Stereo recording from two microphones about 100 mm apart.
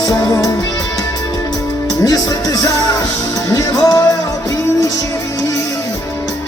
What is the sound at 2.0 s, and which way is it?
Music, 35° left (ahead or behind).